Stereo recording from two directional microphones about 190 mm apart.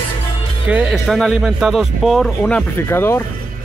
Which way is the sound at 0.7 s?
5° right (ahead or behind).